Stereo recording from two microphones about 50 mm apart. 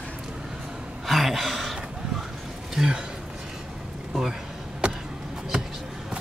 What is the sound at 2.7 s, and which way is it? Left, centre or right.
Speech, centre.